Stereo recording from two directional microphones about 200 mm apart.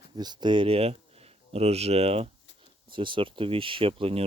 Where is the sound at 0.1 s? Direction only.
20° right (ahead or behind).